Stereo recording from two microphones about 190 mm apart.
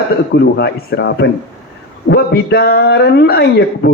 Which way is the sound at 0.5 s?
60° left (ahead or behind).